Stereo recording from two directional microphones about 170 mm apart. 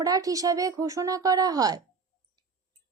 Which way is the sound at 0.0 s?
20° right (ahead or behind).